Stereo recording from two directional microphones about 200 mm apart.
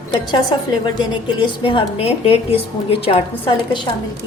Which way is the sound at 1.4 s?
25° left (ahead or behind).